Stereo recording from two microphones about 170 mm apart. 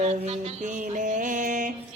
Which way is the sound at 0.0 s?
40° right (ahead or behind).